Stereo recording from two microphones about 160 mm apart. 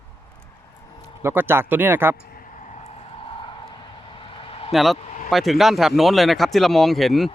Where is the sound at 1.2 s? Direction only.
15° right (ahead or behind).